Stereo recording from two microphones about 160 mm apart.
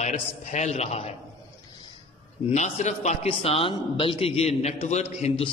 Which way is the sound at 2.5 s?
45° left (ahead or behind).